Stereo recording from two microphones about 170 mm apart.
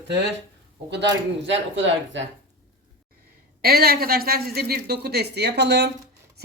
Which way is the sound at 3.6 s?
65° right (ahead or behind).